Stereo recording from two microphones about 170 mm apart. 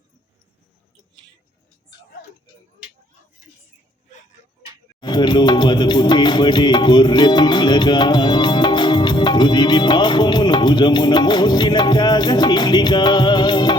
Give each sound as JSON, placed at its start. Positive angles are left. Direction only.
{"t": 4.9, "sound": "music", "side_deg": 25}